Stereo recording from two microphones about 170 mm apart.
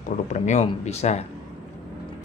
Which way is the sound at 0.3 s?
45° left (ahead or behind).